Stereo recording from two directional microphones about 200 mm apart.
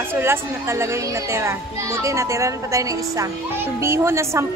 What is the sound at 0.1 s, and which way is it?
A woman's voice, 10° right (ahead or behind).